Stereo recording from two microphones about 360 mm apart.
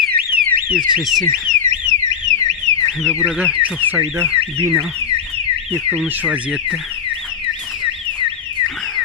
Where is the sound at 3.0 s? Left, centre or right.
Centre.